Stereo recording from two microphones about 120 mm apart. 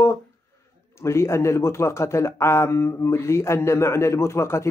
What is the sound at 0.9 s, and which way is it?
A man's voice, 20° left (ahead or behind).